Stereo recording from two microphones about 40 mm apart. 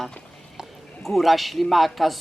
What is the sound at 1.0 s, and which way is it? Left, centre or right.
Speech, centre.